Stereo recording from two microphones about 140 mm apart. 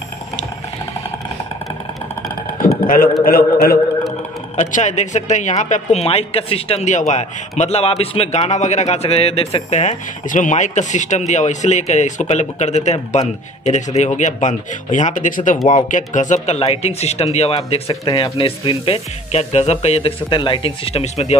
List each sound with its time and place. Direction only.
2.6 s a man's voice: 85° left
4.6 s speech: 60° left (ahead or behind)
16.4 s speech: 45° left (ahead or behind)